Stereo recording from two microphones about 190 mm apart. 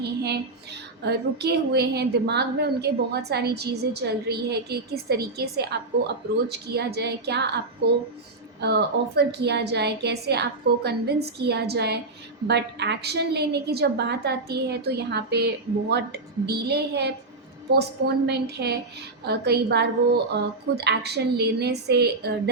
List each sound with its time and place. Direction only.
0.0 s a woman's voice: 60° right (ahead or behind)
8.6 s a woman's voice: 60° right (ahead or behind)
18.3 s a woman's voice: 60° right (ahead or behind)